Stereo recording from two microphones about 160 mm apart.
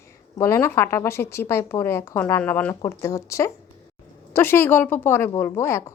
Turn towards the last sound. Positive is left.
turn(degrees=15)  # may be behind; listen again after turning